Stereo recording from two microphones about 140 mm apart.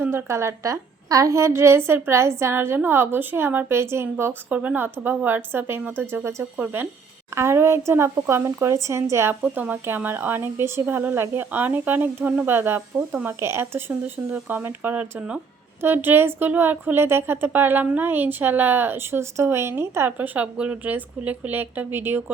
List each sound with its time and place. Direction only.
0.0 s a woman's voice: 15° right (ahead or behind)